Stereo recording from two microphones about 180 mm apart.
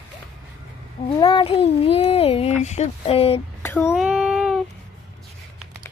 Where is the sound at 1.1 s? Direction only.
25° left (ahead or behind).